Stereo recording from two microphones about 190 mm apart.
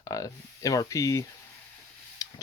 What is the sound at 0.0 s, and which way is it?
Speech, 15° left (ahead or behind).